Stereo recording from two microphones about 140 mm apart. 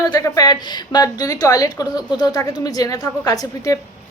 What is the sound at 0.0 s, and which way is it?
A woman's voice, 25° left (ahead or behind).